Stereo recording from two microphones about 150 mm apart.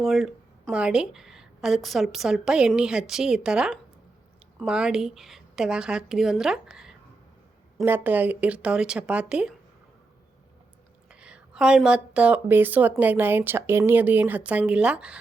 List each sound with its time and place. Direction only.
0.0 s a woman's voice: centre (ahead or behind)
11.1 s speech: 5° right (ahead or behind)